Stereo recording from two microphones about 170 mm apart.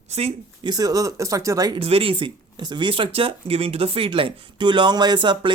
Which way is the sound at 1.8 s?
35° right (ahead or behind).